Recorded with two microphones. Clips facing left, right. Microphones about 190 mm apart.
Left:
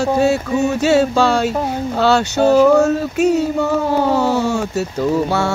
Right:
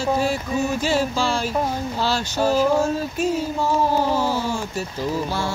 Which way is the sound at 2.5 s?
70° left (ahead or behind).